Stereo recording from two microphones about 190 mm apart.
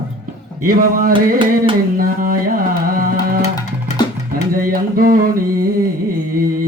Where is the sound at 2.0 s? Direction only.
50° right (ahead or behind).